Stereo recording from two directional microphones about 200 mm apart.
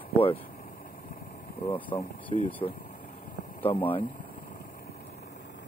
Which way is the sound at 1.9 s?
35° left (ahead or behind).